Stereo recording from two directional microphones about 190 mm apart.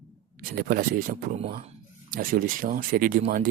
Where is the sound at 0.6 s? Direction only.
50° right (ahead or behind).